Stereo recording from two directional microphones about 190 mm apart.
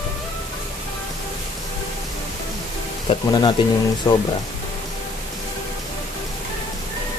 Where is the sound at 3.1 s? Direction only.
20° left (ahead or behind).